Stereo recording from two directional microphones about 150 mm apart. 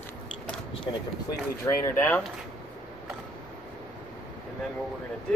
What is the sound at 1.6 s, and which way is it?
Speech, 20° left (ahead or behind).